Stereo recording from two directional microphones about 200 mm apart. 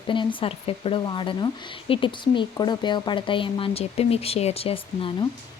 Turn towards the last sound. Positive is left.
turn(degrees=30)  # may be behind; listen again after turning